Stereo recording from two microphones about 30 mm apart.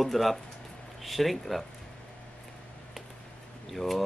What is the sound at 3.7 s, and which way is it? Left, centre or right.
Speech, centre.